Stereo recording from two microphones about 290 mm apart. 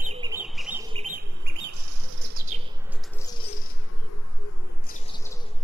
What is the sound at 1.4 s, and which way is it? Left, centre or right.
Bird, right.